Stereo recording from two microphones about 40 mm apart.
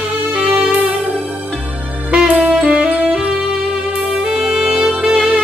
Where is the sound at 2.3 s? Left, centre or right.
Right.